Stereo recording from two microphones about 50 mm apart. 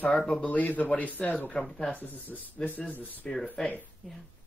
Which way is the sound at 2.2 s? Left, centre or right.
Left.